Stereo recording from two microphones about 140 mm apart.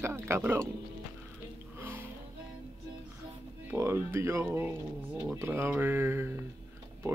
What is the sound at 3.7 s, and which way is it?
Speech, 20° right (ahead or behind).